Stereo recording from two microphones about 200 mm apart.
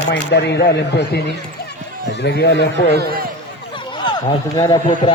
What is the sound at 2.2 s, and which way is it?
Speech, 60° left (ahead or behind).